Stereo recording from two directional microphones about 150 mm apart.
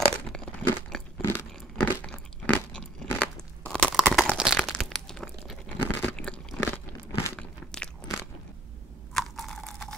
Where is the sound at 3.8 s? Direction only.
Centre (ahead or behind).